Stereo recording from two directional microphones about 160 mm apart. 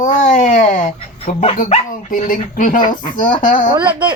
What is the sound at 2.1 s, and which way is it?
Speech, 55° left (ahead or behind).